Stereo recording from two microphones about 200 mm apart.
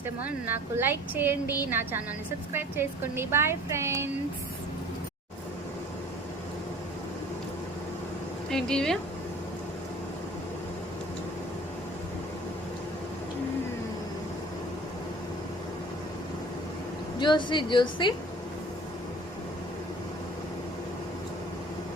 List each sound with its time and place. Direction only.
0.3 s a woman's voice: 10° right (ahead or behind)
8.4 s speech: 5° left (ahead or behind)
17.2 s a woman's voice: 25° left (ahead or behind)